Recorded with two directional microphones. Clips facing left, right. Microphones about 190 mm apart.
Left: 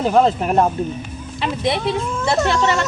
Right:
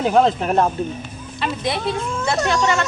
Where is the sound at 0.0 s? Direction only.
Centre (ahead or behind).